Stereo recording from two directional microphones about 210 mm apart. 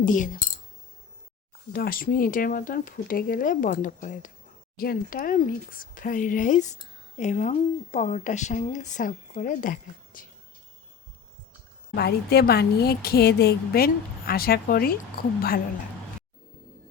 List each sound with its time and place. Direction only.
0.0 s speech: 40° left (ahead or behind)
1.7 s speech: 45° left (ahead or behind)
11.9 s a woman's voice: 50° left (ahead or behind)